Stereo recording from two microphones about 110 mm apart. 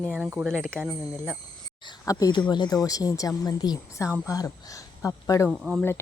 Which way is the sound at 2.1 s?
35° left (ahead or behind).